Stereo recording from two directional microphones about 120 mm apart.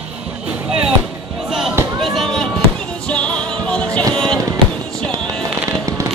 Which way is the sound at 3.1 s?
10° left (ahead or behind).